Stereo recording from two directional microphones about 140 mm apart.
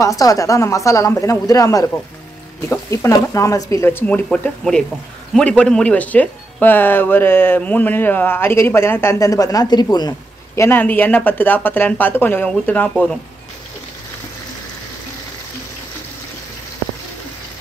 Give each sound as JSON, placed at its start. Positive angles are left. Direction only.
{"t": 0.0, "sound": "speech", "side_deg": 25}